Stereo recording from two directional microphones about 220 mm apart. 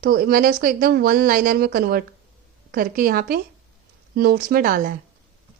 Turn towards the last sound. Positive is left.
turn(degrees=-40)  # may be behind; listen again after turning